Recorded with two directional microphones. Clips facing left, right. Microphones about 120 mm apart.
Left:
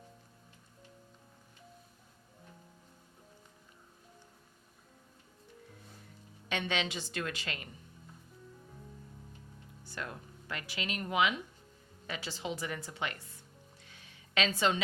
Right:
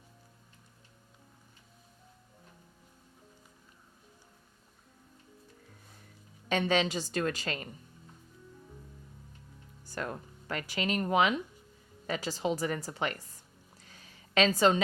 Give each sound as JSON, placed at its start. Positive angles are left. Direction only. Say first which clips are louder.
{"t": 6.5, "sound": "speech", "louder": "right 7 dB", "side_deg": -40}
{"t": 9.8, "sound": "speech", "louder": "right 5 dB", "side_deg": -45}
{"t": 13.8, "sound": "a sound", "louder": "right 2 dB", "side_deg": -40}